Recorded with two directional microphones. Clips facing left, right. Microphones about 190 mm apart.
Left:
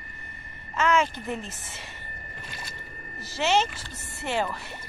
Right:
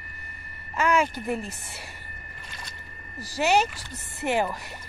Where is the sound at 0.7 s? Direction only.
10° right (ahead or behind).